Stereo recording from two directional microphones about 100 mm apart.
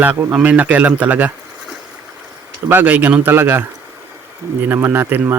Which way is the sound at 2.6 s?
20° right (ahead or behind).